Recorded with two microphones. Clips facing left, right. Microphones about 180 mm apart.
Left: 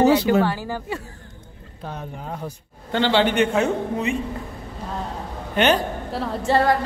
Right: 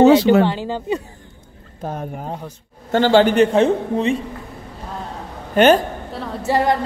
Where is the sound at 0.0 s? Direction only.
80° right.